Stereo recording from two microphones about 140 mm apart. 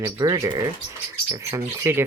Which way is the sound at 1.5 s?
20° right (ahead or behind).